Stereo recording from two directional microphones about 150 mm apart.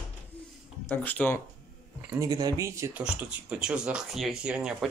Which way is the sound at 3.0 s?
5° right (ahead or behind).